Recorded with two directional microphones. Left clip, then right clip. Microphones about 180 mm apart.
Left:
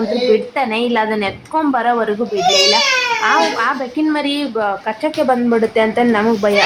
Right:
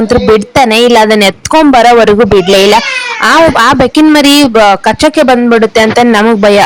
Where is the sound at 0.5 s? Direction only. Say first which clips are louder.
Right 12 dB; 65° right (ahead or behind).